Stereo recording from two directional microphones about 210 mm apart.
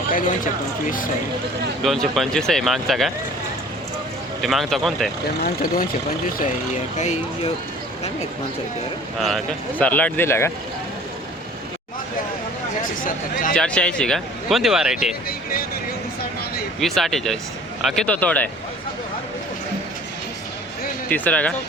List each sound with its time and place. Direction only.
0.9 s speech: 40° left (ahead or behind)
1.8 s speech: centre (ahead or behind)
4.4 s speech: centre (ahead or behind)
7.0 s speech: 35° left (ahead or behind)
9.2 s speech: centre (ahead or behind)
12.8 s a sound: 40° left (ahead or behind)
13.5 s speech: 5° left (ahead or behind)
15.3 s a sound: 45° left (ahead or behind)
16.8 s speech: centre (ahead or behind)
21.1 s speech: 5° left (ahead or behind)